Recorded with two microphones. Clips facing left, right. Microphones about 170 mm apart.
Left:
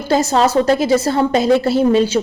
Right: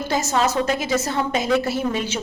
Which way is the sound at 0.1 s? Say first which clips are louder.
Left 8 dB; 35° left (ahead or behind).